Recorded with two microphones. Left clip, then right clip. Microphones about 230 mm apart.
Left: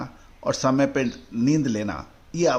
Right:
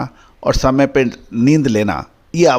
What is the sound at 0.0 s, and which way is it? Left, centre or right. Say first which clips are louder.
Speech: right 9 dB; right.